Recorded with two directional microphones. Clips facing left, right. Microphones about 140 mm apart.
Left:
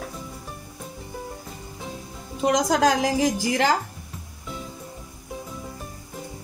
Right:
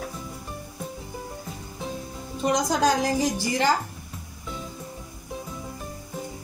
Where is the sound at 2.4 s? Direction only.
85° left.